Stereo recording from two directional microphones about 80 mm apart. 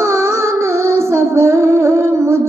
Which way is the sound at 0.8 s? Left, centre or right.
Right.